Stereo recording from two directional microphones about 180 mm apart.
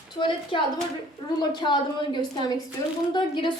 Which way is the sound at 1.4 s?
25° left (ahead or behind).